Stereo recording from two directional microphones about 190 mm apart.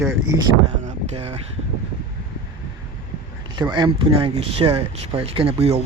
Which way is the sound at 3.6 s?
20° right (ahead or behind).